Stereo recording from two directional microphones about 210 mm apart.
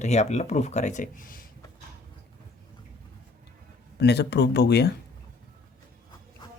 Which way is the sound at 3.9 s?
55° left (ahead or behind).